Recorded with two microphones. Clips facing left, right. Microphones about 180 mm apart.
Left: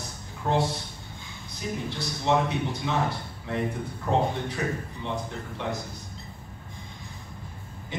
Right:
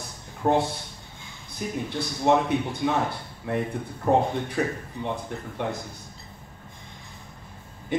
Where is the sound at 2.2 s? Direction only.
55° right (ahead or behind).